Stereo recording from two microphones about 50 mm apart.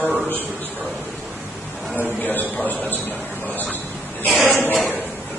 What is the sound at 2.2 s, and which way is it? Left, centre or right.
Speech, left.